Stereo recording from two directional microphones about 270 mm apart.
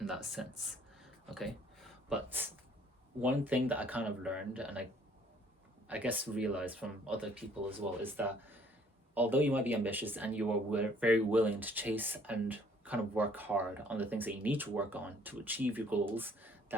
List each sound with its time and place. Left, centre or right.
0.0 s speech: centre
5.9 s speech: centre